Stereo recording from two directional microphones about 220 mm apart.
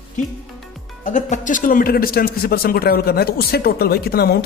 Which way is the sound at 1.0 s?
35° left (ahead or behind).